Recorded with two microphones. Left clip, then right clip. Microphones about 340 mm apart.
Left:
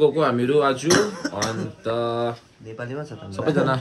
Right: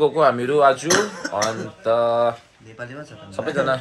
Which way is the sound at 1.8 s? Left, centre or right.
Centre.